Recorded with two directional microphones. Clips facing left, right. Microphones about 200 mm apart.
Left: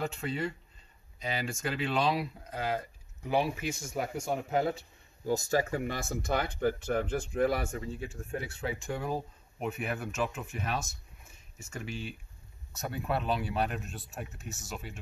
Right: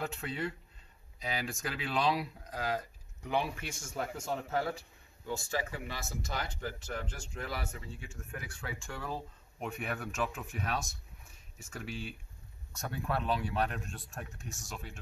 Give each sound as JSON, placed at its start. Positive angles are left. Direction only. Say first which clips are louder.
{"t": 0.0, "sound": "speech", "louder": "left 3 dB", "side_deg": 0}
{"t": 5.2, "sound": "speech", "louder": "left 8 dB", "side_deg": 40}
{"t": 9.6, "sound": "speech", "louder": "left 4 dB", "side_deg": 5}